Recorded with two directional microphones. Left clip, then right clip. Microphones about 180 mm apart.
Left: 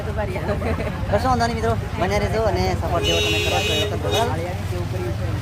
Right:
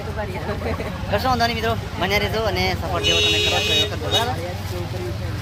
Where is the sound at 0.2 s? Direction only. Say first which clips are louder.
Left 2 dB; 45° left (ahead or behind).